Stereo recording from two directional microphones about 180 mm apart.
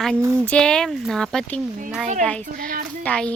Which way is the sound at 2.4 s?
50° right (ahead or behind).